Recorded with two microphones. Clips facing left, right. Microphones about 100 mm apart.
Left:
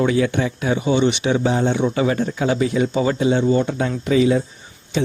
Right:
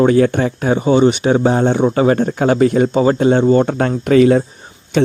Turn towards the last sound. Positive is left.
turn(degrees=-65)  # may be behind; listen again after turning